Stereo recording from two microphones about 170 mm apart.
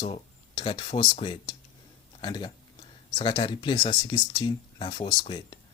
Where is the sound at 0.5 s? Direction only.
30° left (ahead or behind).